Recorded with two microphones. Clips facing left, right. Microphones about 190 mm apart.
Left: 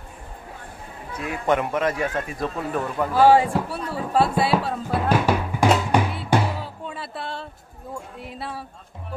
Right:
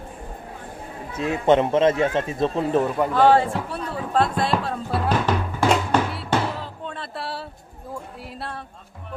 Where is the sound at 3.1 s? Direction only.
10° left (ahead or behind).